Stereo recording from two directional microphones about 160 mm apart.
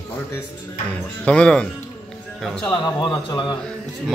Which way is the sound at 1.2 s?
5° left (ahead or behind).